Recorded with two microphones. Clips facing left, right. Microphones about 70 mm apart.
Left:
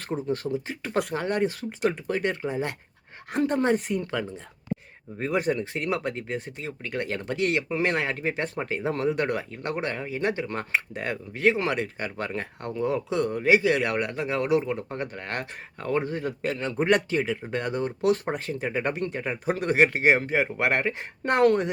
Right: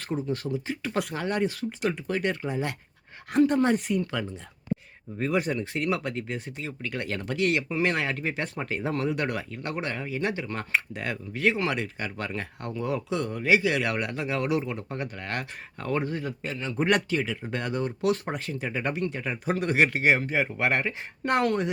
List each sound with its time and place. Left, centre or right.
0.1 s speech: left
5.4 s speech: left
15.8 s speech: centre
16.4 s a man's voice: left
16.8 s speech: left
19.2 s speech: left